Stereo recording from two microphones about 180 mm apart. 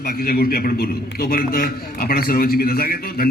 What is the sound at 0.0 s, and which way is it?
A man's voice, 55° left (ahead or behind).